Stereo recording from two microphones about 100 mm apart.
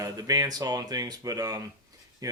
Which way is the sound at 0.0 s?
40° right (ahead or behind).